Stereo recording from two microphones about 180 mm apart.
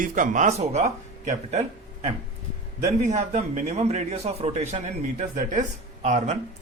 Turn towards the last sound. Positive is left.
turn(degrees=-40)  # may be behind; listen again after turning